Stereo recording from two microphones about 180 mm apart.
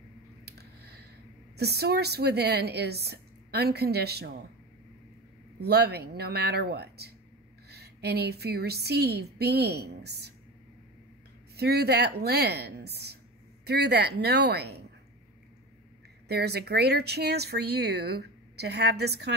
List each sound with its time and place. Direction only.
0.5 s a sound: 65° right (ahead or behind)
1.6 s speech: 65° right (ahead or behind)
5.6 s speech: 65° right (ahead or behind)
11.5 s speech: 65° right (ahead or behind)
16.3 s speech: 65° right (ahead or behind)